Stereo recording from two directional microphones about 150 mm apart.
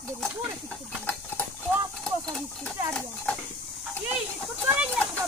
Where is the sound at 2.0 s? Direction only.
5° left (ahead or behind).